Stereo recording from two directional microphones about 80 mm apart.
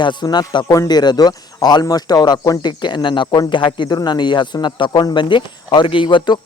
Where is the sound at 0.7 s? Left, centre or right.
Left.